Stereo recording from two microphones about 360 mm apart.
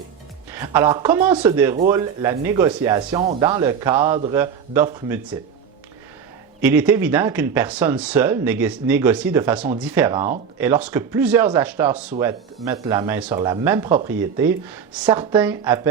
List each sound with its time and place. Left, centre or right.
0.5 s speech: centre
6.6 s speech: centre